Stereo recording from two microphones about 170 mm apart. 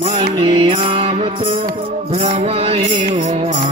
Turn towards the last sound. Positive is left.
turn(degrees=-40)  # may be behind; listen again after turning